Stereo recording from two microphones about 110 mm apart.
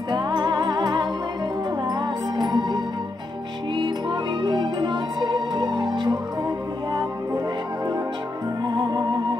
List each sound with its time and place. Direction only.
0.1 s music: 45° right (ahead or behind)
8.6 s music: 40° right (ahead or behind)